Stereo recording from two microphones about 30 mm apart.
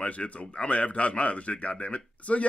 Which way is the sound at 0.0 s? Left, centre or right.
Left.